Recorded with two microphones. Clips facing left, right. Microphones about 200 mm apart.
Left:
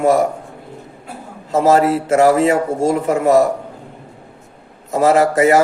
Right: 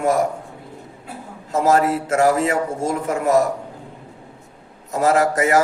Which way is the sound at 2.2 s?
65° left (ahead or behind).